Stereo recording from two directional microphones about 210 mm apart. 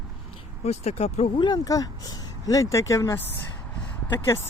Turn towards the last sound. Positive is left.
turn(degrees=10)  # may be behind; listen again after turning